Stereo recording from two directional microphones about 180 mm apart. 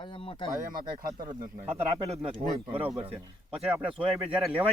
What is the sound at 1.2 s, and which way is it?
Speech, 20° right (ahead or behind).